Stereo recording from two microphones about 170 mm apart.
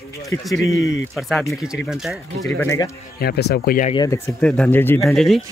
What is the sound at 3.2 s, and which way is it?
Speech, 70° left (ahead or behind).